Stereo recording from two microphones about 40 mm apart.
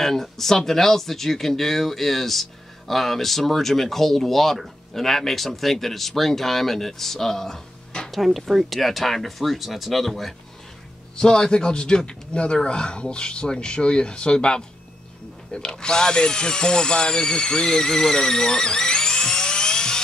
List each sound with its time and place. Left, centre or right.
0.0 s speech: centre
8.1 s speech: centre
11.1 s speech: centre